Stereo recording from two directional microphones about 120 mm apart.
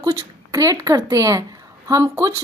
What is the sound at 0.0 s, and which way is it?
A woman's voice, 25° right (ahead or behind).